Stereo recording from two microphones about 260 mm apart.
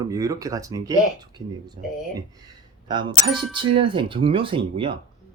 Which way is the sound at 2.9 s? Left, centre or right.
Centre.